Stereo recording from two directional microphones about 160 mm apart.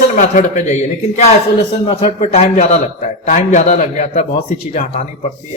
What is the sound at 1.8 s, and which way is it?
A man's voice, 35° left (ahead or behind).